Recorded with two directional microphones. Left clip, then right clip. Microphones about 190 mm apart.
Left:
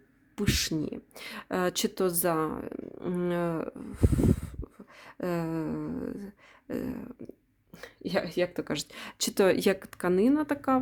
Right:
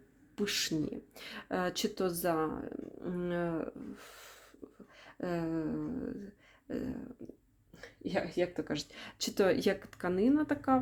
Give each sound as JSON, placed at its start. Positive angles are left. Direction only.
{"t": 0.3, "sound": "speech", "side_deg": 30}
{"t": 4.9, "sound": "a sound", "side_deg": 35}
{"t": 7.8, "sound": "speech", "side_deg": 45}